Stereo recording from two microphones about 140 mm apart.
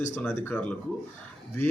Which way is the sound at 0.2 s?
10° left (ahead or behind).